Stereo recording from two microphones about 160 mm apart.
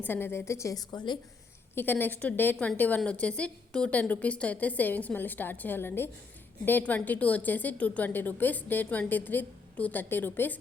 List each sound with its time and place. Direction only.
0.0 s a woman's voice: 15° left (ahead or behind)
1.7 s a woman's voice: 15° left (ahead or behind)